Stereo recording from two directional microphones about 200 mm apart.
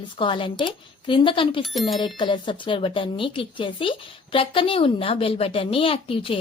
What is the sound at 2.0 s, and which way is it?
Speech, 25° left (ahead or behind).